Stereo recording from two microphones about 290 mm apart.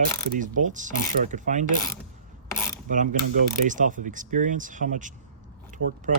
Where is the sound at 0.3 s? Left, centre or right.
Right.